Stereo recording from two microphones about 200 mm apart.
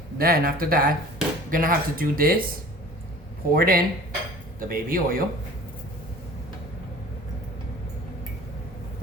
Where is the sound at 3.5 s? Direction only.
45° right (ahead or behind).